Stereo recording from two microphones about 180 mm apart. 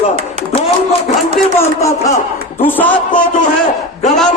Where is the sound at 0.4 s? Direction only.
35° right (ahead or behind).